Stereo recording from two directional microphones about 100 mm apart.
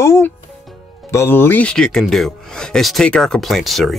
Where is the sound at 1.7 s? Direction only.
5° left (ahead or behind).